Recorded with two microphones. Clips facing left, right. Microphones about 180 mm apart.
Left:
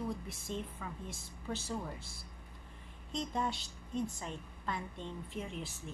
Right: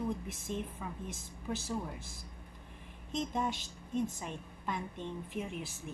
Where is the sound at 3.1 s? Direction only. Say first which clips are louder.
Right 2 dB; 20° right (ahead or behind).